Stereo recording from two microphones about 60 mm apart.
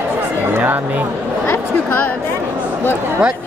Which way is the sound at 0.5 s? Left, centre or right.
Right.